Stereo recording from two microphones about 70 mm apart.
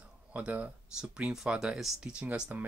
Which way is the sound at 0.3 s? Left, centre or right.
Right.